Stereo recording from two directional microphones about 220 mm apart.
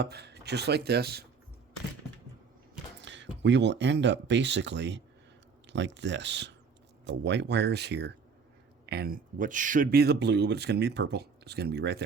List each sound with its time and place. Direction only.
0.0 s speech: 50° right (ahead or behind)
3.0 s speech: 55° right (ahead or behind)